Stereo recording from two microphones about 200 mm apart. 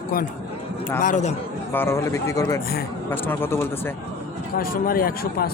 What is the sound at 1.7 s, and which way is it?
Speech, 10° left (ahead or behind).